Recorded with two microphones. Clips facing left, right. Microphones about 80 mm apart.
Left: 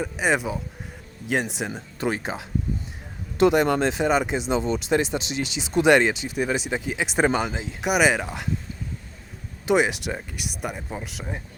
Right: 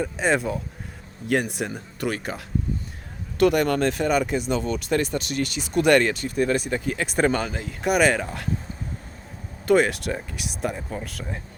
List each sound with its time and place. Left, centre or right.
0.0 s speech: centre
1.5 s speech: centre
9.6 s speech: centre